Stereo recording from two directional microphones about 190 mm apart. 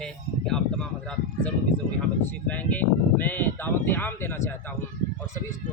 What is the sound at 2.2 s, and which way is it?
Speech, 10° left (ahead or behind).